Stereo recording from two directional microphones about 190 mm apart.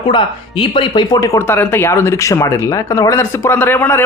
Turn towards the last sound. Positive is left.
turn(degrees=10)  # may be behind; listen again after turning